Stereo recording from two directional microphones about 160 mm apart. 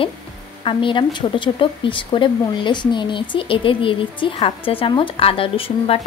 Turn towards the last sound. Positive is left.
turn(degrees=35)  # may be behind; listen again after turning